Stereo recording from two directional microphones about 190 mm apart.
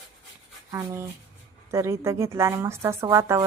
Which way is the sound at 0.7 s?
15° right (ahead or behind).